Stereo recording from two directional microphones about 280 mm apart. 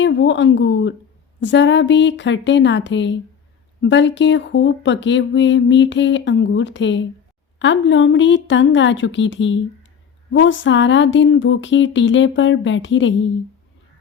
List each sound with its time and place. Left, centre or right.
0.0 s speech: left